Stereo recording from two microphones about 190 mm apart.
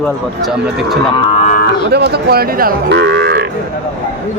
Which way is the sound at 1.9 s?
60° right (ahead or behind).